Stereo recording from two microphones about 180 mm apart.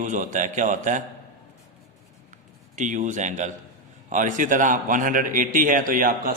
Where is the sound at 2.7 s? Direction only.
45° right (ahead or behind).